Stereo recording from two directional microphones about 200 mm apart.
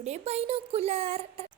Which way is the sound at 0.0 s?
35° right (ahead or behind).